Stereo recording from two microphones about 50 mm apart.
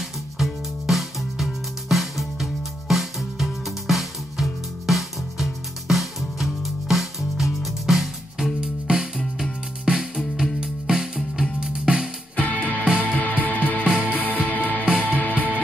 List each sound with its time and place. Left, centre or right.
0.4 s music: centre
8.5 s music: centre
12.4 s music: left